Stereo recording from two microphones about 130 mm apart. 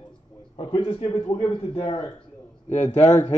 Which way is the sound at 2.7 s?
65° left (ahead or behind).